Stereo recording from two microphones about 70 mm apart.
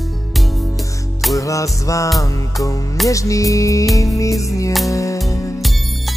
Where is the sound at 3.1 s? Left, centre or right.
Left.